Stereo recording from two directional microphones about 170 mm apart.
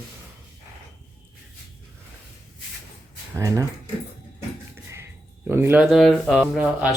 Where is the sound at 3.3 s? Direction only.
20° right (ahead or behind).